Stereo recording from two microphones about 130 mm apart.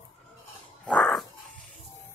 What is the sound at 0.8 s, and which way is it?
Dog, 5° left (ahead or behind).